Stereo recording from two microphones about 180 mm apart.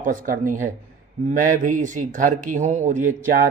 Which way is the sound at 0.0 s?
50° right (ahead or behind).